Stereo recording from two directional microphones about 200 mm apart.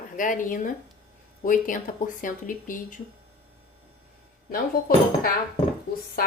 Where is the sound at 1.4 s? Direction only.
40° left (ahead or behind).